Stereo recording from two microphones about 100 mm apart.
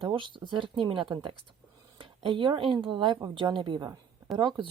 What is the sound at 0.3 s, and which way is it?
Speech, 55° right (ahead or behind).